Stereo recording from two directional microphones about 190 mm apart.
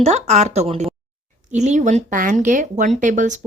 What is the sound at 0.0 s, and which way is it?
A woman's voice, 35° right (ahead or behind).